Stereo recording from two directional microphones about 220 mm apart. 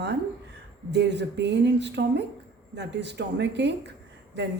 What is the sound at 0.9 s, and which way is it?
A woman's voice, 50° right (ahead or behind).